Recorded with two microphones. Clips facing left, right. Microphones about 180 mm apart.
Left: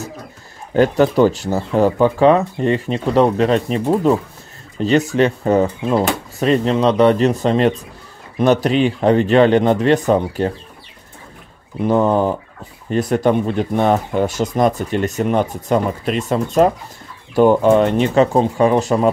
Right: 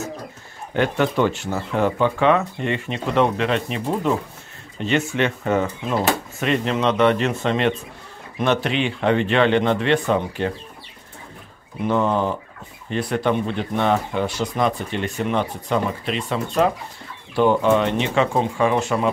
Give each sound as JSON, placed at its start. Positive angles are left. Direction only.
{"t": 0.7, "sound": "speech", "side_deg": 35}
{"t": 11.8, "sound": "speech", "side_deg": 40}